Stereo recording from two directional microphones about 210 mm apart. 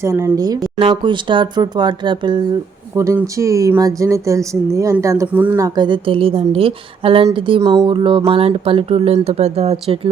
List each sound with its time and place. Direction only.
0.0 s speech: 15° right (ahead or behind); by 10.1 s 30° right (ahead or behind)